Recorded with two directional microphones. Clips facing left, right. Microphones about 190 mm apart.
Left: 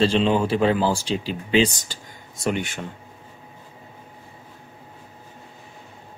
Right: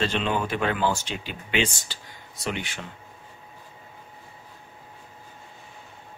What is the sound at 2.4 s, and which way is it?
Speech, 45° left (ahead or behind).